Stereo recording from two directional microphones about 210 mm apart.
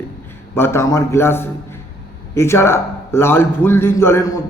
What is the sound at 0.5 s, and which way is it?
A man's voice, 10° left (ahead or behind).